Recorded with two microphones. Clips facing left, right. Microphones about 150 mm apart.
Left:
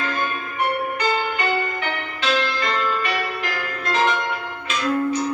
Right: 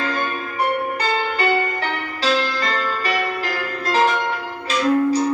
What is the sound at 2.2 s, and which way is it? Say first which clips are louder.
Music: right 2 dB; 35° right (ahead or behind).